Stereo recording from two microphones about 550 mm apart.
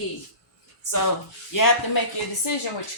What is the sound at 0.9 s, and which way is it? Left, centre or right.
Speech, left.